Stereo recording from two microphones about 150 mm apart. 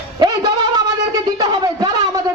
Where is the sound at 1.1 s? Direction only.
25° right (ahead or behind).